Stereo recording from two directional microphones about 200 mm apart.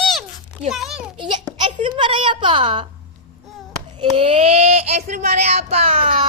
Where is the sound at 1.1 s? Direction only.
25° right (ahead or behind).